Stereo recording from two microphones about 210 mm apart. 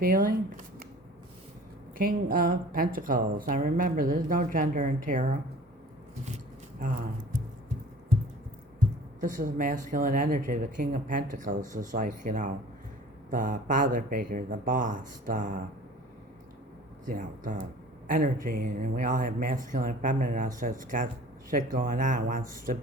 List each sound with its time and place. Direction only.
0.0 s speech: 40° right (ahead or behind)
2.0 s speech: 45° right (ahead or behind)
6.2 s a sound: 35° right (ahead or behind)
9.2 s speech: 40° right (ahead or behind)
17.1 s speech: 40° right (ahead or behind)